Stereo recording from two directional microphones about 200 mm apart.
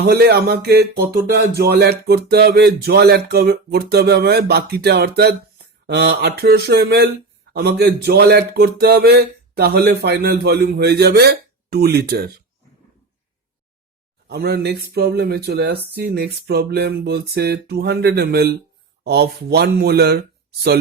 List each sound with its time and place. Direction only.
0.0 s music: 55° right (ahead or behind)
14.3 s music: 55° right (ahead or behind)